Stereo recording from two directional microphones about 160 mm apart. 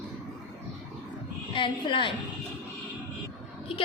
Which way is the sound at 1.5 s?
30° left (ahead or behind).